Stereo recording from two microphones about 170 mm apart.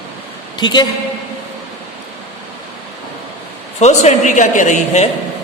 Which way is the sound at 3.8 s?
40° left (ahead or behind).